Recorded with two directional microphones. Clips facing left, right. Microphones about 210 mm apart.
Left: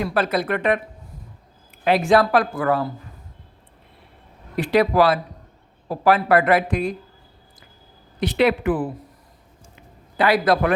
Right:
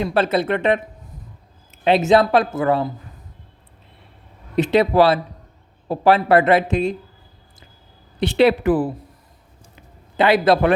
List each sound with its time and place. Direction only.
0.0 s speech: 25° right (ahead or behind)
4.5 s speech: 25° right (ahead or behind)
8.2 s a woman's voice: 30° right (ahead or behind)
10.2 s speech: 25° right (ahead or behind)